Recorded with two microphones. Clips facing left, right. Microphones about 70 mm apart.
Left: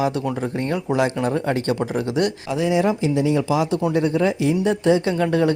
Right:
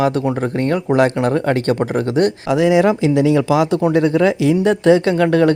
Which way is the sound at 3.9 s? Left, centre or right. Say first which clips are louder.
Right 5 dB; right.